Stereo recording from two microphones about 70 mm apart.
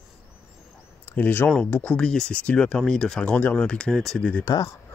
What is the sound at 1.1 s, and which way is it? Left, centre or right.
Speech, left.